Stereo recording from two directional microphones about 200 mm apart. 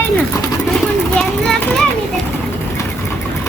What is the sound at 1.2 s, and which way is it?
Children playing, centre (ahead or behind).